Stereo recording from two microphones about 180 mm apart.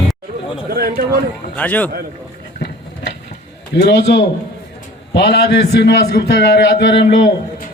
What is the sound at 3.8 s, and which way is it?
A man's voice, 75° left (ahead or behind).